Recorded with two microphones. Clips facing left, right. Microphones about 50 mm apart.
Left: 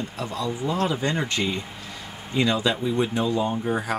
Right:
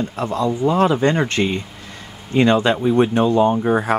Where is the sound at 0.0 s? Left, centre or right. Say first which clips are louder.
Right 8 dB; right.